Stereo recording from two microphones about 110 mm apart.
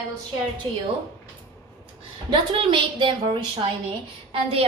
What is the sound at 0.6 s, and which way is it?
Speech, 50° right (ahead or behind).